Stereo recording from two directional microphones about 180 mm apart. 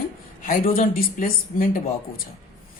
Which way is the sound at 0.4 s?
50° left (ahead or behind).